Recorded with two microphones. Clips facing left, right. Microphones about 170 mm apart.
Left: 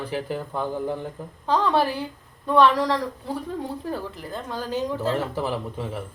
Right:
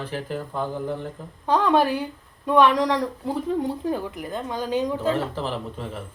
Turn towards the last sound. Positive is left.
turn(degrees=10)  # may be behind; listen again after turning